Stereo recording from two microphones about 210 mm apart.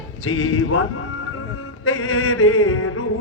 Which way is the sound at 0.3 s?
85° left.